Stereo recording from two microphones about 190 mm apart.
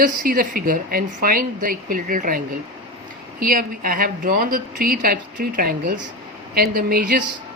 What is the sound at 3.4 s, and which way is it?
Speech, 45° right (ahead or behind).